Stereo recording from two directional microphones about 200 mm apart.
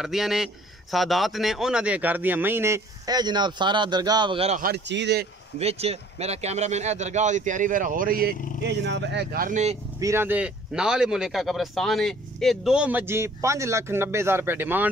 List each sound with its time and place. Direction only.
0.0 s a man's voice: centre (ahead or behind); by 4.6 s 25° right (ahead or behind)
4.6 s speech: 50° right (ahead or behind)
5.6 s a man's voice: 30° right (ahead or behind)
8.6 s speech: 60° right (ahead or behind); by 9.8 s 35° right (ahead or behind)
9.9 s speech: 15° right (ahead or behind)